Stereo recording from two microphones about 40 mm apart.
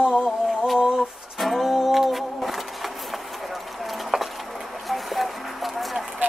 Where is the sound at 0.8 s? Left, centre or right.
Centre.